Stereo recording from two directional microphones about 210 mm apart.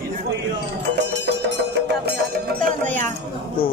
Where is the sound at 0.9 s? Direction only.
55° right (ahead or behind); by 3.1 s 40° right (ahead or behind).